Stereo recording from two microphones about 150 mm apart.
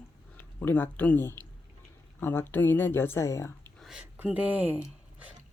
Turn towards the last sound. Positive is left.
turn(degrees=-10)  # may be behind; listen again after turning